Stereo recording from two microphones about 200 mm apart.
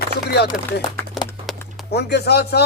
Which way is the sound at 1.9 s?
55° left (ahead or behind).